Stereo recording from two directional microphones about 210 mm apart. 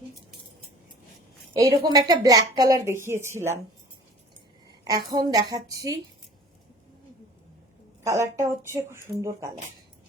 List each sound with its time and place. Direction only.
1.5 s speech: 15° right (ahead or behind)
4.9 s speech: 20° right (ahead or behind)
8.0 s speech: 15° right (ahead or behind)